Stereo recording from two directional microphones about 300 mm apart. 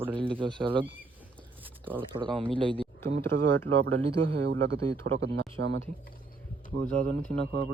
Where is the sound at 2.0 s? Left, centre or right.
Centre.